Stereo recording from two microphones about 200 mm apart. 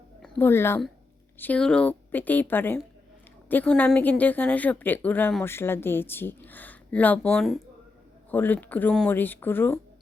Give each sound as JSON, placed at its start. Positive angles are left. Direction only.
{"t": 0.2, "sound": "a woman's voice", "side_deg": 10}